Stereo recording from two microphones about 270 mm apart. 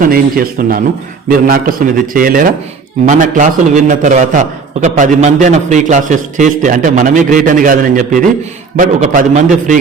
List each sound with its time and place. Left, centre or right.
0.0 s a man's voice: right